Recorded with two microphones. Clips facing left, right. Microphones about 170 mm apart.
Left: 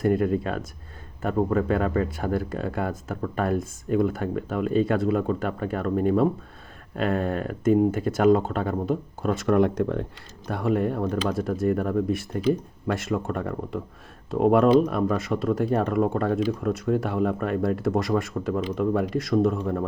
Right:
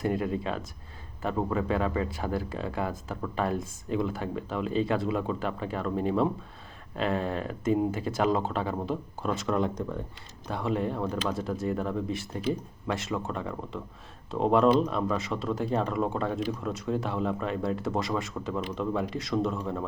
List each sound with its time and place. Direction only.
0.0 s speech: 55° left (ahead or behind); by 10.1 s 70° left (ahead or behind)
10.5 s speech: 55° left (ahead or behind)
14.8 s speech: 55° left (ahead or behind)